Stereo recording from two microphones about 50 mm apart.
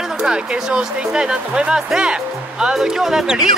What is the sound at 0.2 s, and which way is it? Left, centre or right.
Speech, centre.